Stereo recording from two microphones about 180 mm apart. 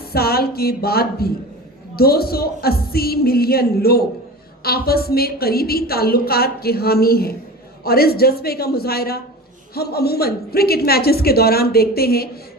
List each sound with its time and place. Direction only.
0.1 s a woman's voice: 60° left (ahead or behind)